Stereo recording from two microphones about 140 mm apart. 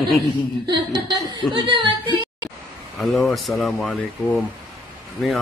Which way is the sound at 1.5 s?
35° right (ahead or behind).